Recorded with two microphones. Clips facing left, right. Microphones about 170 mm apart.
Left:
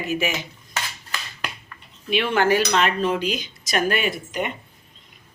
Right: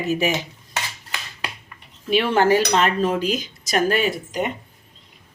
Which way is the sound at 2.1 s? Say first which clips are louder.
Right 3 dB; 35° right (ahead or behind).